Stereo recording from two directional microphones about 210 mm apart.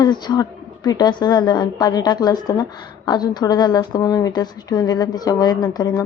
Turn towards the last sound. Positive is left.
turn(degrees=20)  # may be behind; listen again after turning